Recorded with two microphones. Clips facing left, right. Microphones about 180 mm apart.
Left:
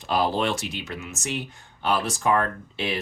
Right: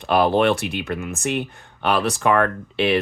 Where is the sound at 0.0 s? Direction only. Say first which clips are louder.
Right 7 dB; 60° right (ahead or behind).